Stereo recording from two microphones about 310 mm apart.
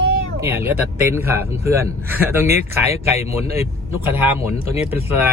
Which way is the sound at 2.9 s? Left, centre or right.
Centre.